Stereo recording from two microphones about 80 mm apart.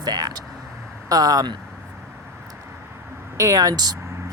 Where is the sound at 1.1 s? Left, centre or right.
Right.